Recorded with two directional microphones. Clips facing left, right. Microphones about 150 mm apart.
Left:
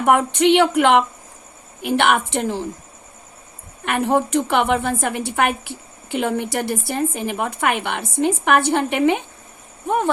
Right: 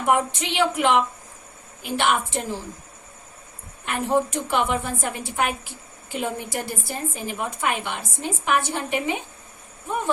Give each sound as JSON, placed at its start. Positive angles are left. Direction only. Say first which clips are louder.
{"t": 0.0, "sound": "a woman's voice", "louder": "left 6 dB", "side_deg": 65}
{"t": 3.8, "sound": "a woman's voice", "louder": "left 4 dB", "side_deg": 65}